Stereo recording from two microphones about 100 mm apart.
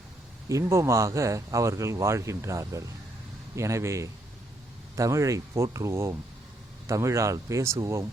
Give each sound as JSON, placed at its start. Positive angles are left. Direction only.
{"t": 0.4, "sound": "speech", "side_deg": -30}